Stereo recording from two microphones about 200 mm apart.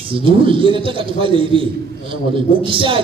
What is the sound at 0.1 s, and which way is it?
A man's voice, 25° right (ahead or behind).